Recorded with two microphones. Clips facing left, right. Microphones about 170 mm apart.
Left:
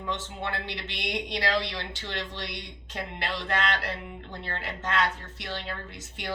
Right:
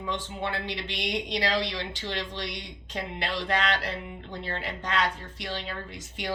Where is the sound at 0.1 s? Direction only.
15° right (ahead or behind).